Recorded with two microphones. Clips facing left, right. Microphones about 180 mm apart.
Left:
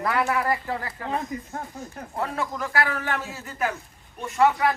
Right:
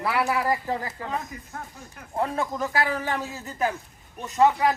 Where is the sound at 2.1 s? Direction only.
20° right (ahead or behind).